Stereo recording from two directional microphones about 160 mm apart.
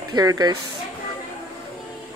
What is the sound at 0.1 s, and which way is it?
Speech, 25° right (ahead or behind).